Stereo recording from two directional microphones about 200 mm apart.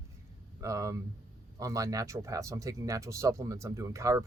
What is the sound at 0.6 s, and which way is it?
Speech, 15° right (ahead or behind).